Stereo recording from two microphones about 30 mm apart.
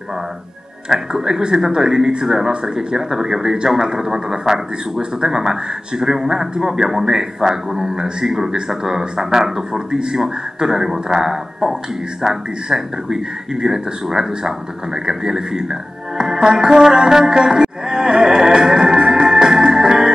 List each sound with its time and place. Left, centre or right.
0.8 s a man's voice: right
2.2 s a man's voice: centre
17.1 s music: right